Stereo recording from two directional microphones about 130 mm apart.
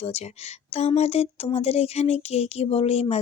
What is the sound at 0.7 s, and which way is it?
Speech, 55° left (ahead or behind).